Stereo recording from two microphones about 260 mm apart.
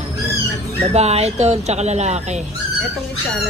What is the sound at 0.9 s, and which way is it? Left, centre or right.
Speech, right.